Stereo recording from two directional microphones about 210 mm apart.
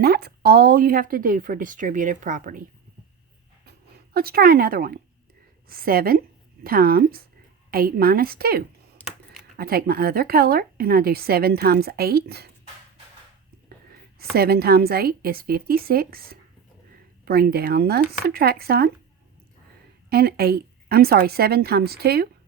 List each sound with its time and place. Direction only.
0.0 s speech: 45° right (ahead or behind)
4.1 s a woman's voice: 45° right (ahead or behind)
14.2 s a woman's voice: 50° right (ahead or behind)
20.1 s a woman's voice: 50° right (ahead or behind)